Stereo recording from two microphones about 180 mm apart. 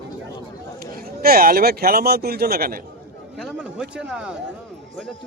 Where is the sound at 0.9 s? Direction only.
55° right (ahead or behind).